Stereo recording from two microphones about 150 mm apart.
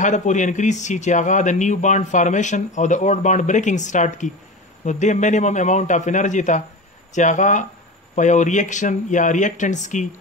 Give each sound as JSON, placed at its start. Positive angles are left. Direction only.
{"t": 0.0, "sound": "speech", "side_deg": 55}